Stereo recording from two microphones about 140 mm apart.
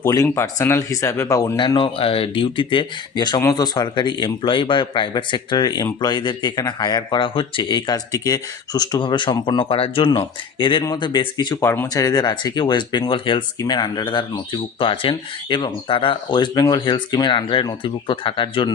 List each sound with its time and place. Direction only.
0.0 s speech: 20° left (ahead or behind)
11.6 s speech: 15° left (ahead or behind); by 18.7 s 35° left (ahead or behind)